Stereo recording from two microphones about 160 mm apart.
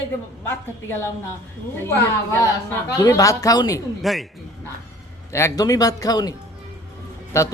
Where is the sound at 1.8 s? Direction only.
15° left (ahead or behind).